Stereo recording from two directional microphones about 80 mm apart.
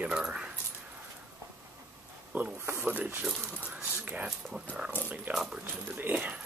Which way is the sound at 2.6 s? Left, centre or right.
Right.